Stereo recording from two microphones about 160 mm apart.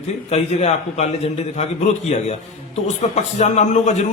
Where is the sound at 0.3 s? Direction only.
40° left (ahead or behind).